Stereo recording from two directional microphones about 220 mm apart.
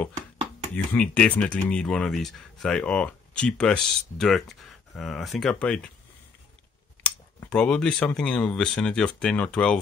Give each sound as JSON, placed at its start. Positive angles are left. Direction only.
{"t": 0.9, "sound": "speech", "side_deg": 5}
{"t": 7.0, "sound": "speech", "side_deg": 5}